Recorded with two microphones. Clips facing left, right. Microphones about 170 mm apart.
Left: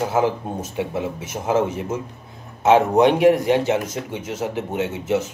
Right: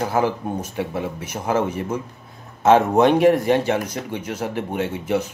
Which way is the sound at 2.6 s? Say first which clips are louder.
Even; 15° left (ahead or behind).